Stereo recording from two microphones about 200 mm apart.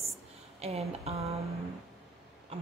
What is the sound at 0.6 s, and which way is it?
Speech, 30° right (ahead or behind).